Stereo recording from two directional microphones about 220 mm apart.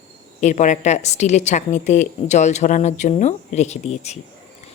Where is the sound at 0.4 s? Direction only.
35° left (ahead or behind).